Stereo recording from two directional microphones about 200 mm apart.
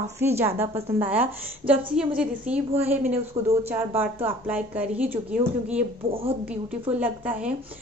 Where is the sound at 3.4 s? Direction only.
30° right (ahead or behind).